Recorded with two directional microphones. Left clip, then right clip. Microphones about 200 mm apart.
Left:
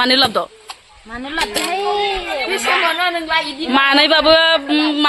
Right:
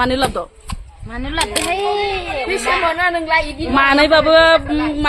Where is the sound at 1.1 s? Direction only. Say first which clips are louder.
Even; 45° right (ahead or behind).